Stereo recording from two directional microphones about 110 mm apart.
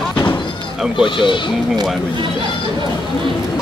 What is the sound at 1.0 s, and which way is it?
Speech, 50° left (ahead or behind).